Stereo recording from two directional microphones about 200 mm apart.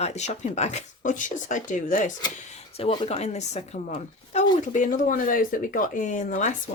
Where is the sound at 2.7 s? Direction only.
25° left (ahead or behind).